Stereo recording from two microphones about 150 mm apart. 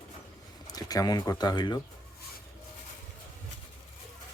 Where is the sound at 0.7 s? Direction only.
25° left (ahead or behind).